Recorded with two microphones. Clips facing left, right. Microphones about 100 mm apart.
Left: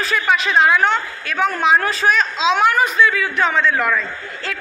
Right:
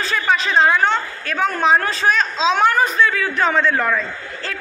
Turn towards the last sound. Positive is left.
turn(degrees=-30)  # may be behind; listen again after turning